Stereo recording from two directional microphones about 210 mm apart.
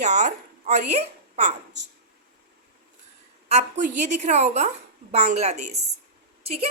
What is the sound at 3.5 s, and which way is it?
A woman's voice, 35° right (ahead or behind).